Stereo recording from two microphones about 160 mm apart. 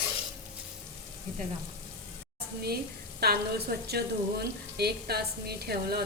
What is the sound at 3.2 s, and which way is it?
Speech, 80° right.